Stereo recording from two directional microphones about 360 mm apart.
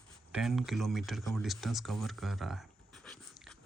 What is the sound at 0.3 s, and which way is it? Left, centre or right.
Speech, centre.